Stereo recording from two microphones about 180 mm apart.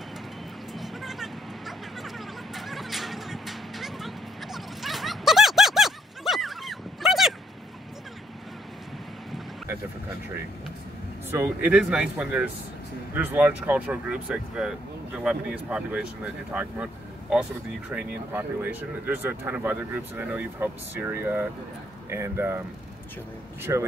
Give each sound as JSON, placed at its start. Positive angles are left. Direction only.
{"t": 0.7, "sound": "a sound", "side_deg": 0}
{"t": 11.2, "sound": "speech", "side_deg": -10}
{"t": 23.6, "sound": "speech", "side_deg": -15}